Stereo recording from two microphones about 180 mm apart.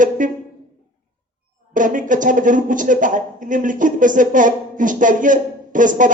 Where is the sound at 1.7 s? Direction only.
45° right (ahead or behind).